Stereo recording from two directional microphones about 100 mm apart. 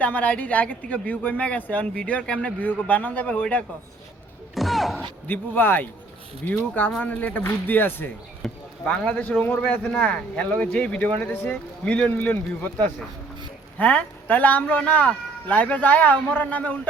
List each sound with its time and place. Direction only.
0.0 s speech: 15° left (ahead or behind)
4.5 s thump: centre (ahead or behind)
5.3 s speech: 20° left (ahead or behind)
8.4 s a sound: 10° left (ahead or behind)
9.4 s speech: 15° left (ahead or behind)
13.7 s speech: 15° left (ahead or behind)